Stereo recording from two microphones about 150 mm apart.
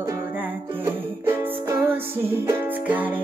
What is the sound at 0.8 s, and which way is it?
Music, 15° right (ahead or behind).